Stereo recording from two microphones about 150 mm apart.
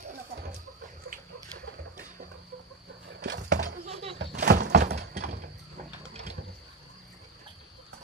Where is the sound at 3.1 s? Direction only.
90° right.